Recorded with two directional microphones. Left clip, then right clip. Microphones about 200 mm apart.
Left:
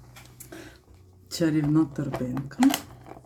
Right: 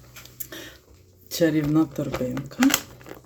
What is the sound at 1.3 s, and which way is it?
Speech, 15° left (ahead or behind).